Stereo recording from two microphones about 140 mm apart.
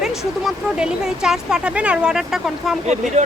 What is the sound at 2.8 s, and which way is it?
Speech, 55° right (ahead or behind).